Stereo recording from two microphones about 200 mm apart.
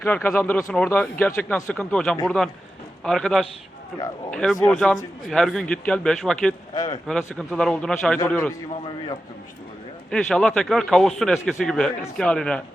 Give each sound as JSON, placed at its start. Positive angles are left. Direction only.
{"t": 0.0, "sound": "speech", "side_deg": 10}
{"t": 6.7, "sound": "speech", "side_deg": 20}
{"t": 7.1, "sound": "speech", "side_deg": 0}
{"t": 10.1, "sound": "speech", "side_deg": 5}